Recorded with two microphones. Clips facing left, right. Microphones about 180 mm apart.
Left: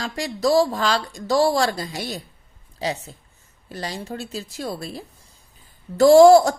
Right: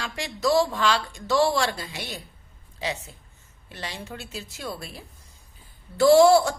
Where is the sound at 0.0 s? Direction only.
35° left (ahead or behind).